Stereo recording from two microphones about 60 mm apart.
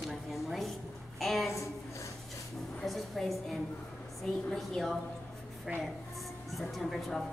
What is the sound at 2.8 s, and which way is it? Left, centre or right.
A woman's voice, centre.